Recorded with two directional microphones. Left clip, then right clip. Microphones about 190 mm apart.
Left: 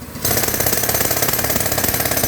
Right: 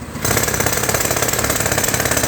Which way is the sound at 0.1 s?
10° left (ahead or behind).